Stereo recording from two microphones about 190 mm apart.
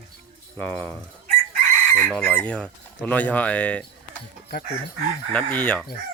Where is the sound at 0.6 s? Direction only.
10° left (ahead or behind).